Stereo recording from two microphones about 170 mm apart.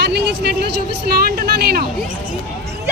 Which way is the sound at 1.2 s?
65° right (ahead or behind).